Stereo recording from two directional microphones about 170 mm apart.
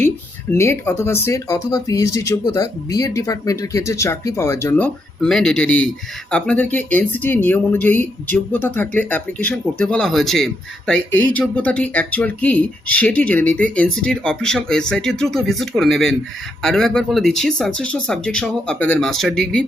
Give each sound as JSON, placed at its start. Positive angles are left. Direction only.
{"t": 0.5, "sound": "speech", "side_deg": 15}
{"t": 5.2, "sound": "speech", "side_deg": 5}